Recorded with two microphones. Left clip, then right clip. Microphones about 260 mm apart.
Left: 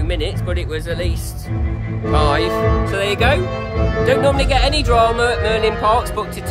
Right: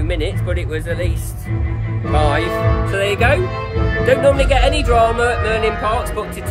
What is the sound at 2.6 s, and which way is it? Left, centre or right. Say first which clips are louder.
Speech: left 2 dB; left.